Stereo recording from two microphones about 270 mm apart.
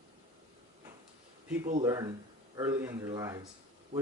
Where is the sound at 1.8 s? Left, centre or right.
Centre.